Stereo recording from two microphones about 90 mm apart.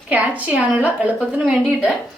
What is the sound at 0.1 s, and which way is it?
A woman's voice, 15° right (ahead or behind).